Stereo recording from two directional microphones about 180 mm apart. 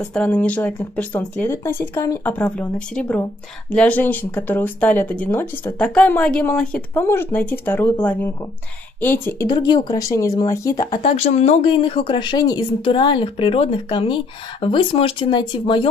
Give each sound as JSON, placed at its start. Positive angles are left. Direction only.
{"t": 0.1, "sound": "speech", "side_deg": 5}
{"t": 9.5, "sound": "a woman's voice", "side_deg": 25}
{"t": 11.1, "sound": "a woman's voice", "side_deg": 40}